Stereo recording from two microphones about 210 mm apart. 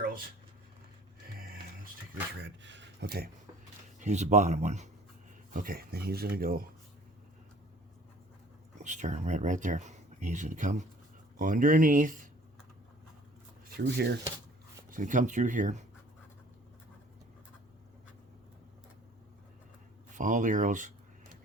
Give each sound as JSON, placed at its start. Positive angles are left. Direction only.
{"t": 2.4, "sound": "speech", "side_deg": -60}
{"t": 4.0, "sound": "speech", "side_deg": -35}
{"t": 5.5, "sound": "speech", "side_deg": -45}
{"t": 8.8, "sound": "speech", "side_deg": -35}
{"t": 13.7, "sound": "speech", "side_deg": -50}
{"t": 14.8, "sound": "speech", "side_deg": -40}
{"t": 20.1, "sound": "speech", "side_deg": -35}